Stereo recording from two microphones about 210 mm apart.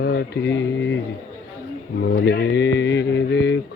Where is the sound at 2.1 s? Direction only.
55° left (ahead or behind).